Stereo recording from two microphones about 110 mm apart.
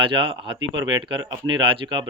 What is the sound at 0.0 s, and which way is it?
Speech, 50° right (ahead or behind).